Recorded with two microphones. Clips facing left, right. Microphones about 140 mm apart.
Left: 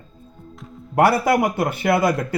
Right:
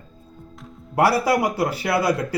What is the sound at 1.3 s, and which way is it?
Speech, 20° left (ahead or behind).